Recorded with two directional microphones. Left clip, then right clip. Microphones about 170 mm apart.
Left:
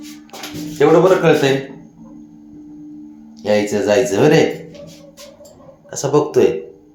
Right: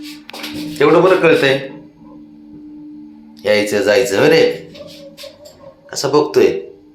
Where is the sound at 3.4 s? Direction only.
10° left (ahead or behind).